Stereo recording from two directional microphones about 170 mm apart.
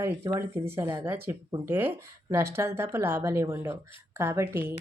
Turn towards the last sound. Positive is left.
turn(degrees=-15)  # may be behind; listen again after turning